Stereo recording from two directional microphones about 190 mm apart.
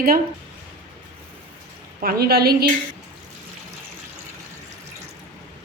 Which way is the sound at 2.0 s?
50° right (ahead or behind).